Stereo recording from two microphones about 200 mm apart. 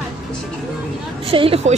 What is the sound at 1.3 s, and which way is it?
Speech, 30° right (ahead or behind).